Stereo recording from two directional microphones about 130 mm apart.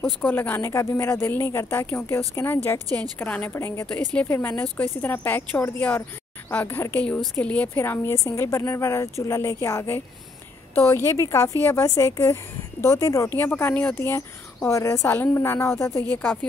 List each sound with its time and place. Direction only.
0.2 s a woman's voice: 15° left (ahead or behind)
11.1 s a woman's voice: 25° left (ahead or behind)